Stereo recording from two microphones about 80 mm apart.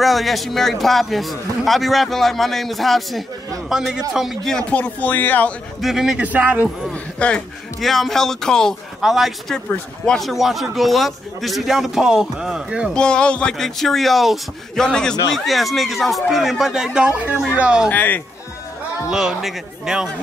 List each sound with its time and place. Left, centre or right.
0.0 s a man's voice: centre
4.5 s speech: centre
4.7 s speech: centre
5.8 s a man's voice: centre
6.1 s a man's voice: centre
6.9 s speech: centre
7.8 s a man's voice: centre
12.9 s a man's voice: centre
17.9 s speech: left
19.0 s speech: centre